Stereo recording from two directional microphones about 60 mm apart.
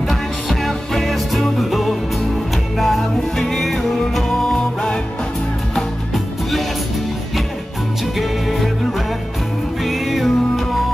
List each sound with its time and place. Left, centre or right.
0.1 s music: centre
5.8 s music: centre
8.2 s music: centre
9.8 s music: centre